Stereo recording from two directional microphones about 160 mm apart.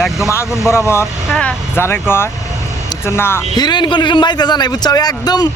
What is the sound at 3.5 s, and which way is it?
A man's voice, 25° left (ahead or behind).